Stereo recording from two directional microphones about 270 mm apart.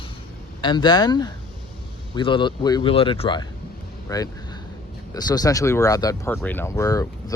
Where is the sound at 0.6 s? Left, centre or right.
Centre.